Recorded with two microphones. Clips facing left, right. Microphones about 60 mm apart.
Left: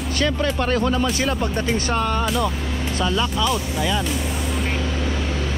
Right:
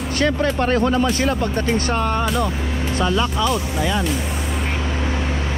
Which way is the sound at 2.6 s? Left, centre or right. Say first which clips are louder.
Right 2 dB; centre.